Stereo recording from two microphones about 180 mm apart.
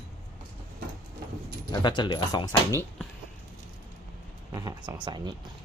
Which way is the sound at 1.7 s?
25° left (ahead or behind).